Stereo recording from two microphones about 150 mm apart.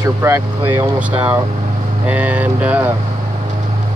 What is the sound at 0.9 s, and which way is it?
Speech, 10° right (ahead or behind).